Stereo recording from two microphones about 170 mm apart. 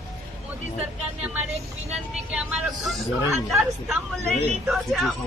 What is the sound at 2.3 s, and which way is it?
A woman's voice, 5° right (ahead or behind).